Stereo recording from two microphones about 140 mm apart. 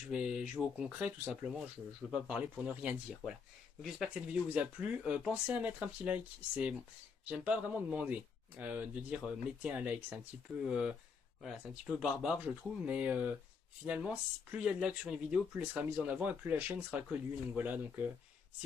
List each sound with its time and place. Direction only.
0.1 s speech: 5° right (ahead or behind)